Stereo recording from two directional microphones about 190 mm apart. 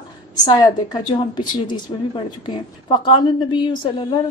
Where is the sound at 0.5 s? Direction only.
20° left (ahead or behind).